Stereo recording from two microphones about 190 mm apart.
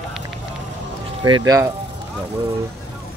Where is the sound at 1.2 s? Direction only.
20° right (ahead or behind).